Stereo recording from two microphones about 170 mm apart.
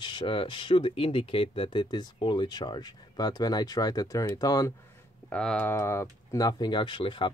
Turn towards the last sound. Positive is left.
turn(degrees=30)  # may be behind; listen again after turning